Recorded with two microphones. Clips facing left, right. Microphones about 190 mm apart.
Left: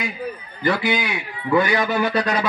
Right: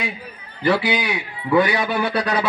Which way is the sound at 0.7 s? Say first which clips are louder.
Right 1 dB; 15° right (ahead or behind).